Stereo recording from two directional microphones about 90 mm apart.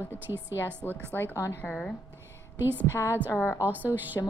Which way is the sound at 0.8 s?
25° left (ahead or behind).